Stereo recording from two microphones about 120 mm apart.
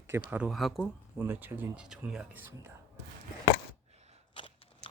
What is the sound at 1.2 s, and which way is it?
A man's voice, 15° right (ahead or behind).